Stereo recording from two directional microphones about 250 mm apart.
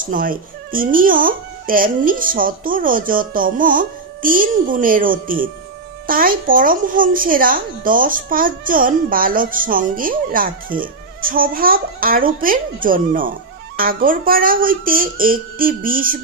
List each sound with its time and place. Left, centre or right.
0.0 s speech: right